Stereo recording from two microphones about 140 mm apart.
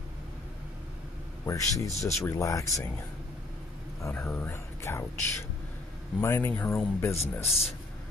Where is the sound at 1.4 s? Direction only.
20° left (ahead or behind).